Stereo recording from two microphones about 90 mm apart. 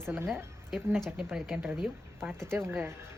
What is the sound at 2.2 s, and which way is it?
Speech, 30° right (ahead or behind).